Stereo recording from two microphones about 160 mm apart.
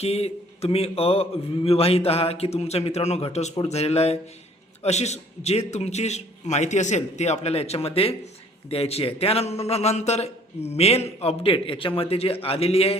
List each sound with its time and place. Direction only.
0.0 s a man's voice: 40° left (ahead or behind)